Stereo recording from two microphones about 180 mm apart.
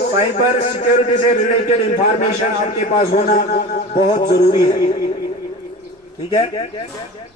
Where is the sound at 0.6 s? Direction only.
35° left (ahead or behind).